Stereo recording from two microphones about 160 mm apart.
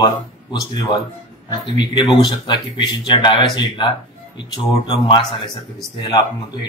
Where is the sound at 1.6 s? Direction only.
30° left (ahead or behind).